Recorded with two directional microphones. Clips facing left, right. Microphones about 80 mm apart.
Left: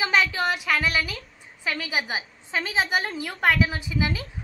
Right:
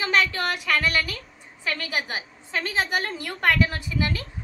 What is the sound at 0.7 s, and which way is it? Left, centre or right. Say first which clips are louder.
A woman's voice: even; centre.